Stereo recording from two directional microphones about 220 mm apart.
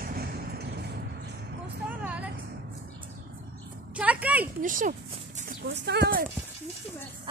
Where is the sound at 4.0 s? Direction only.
5° right (ahead or behind).